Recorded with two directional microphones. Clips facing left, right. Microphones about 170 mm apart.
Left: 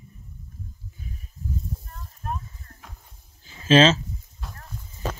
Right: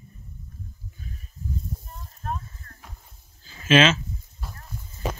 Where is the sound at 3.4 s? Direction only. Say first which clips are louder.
Left 2 dB; 25° left (ahead or behind).